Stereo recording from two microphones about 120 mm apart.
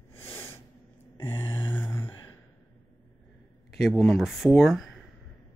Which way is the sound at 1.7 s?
20° left (ahead or behind).